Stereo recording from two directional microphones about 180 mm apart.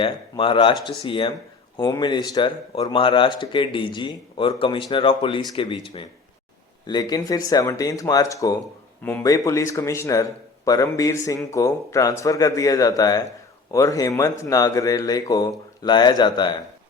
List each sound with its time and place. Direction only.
0.0 s speech: 30° left (ahead or behind)